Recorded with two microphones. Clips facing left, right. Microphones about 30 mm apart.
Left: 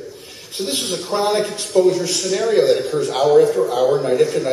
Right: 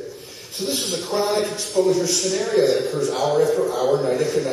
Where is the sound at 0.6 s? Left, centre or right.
Left.